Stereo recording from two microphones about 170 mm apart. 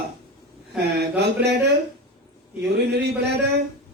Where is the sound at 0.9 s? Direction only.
75° right (ahead or behind).